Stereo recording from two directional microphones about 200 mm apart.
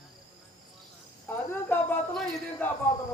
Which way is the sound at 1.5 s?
10° left (ahead or behind).